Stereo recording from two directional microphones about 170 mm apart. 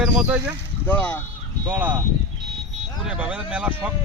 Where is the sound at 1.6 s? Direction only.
10° right (ahead or behind).